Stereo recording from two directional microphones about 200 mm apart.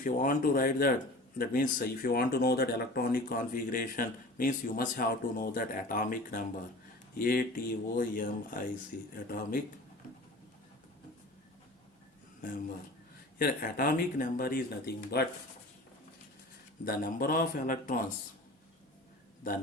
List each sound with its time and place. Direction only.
0.0 s speech: 45° left (ahead or behind)
12.4 s speech: 45° left (ahead or behind)
16.8 s speech: 45° left (ahead or behind)